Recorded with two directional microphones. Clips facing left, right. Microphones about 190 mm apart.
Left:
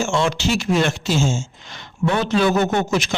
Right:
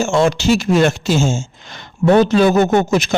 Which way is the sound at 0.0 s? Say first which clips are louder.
Right 5 dB; 40° right (ahead or behind).